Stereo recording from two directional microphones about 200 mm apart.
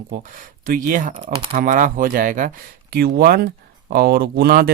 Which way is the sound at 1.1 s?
25° right (ahead or behind).